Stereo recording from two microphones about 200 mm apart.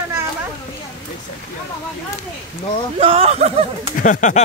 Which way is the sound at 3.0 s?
30° right (ahead or behind).